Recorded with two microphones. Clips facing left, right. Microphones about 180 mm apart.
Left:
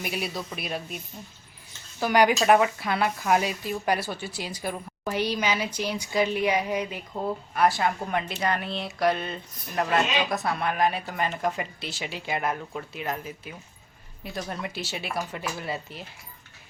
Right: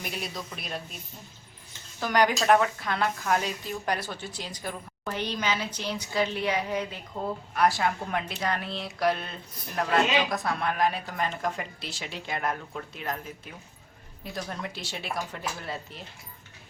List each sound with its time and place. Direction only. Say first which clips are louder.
0.0 s speech: left 4 dB; 5° left (ahead or behind)
2.0 s speech: left 3 dB; 10° left (ahead or behind)
7.5 s speech: left 1 dB; centre (ahead or behind)